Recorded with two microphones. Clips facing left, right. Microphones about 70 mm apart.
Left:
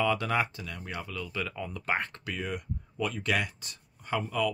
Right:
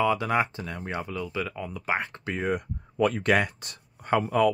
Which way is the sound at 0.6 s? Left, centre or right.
Right.